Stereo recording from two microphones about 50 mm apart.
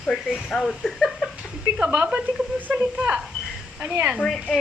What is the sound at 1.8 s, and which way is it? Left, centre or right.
Speech, right.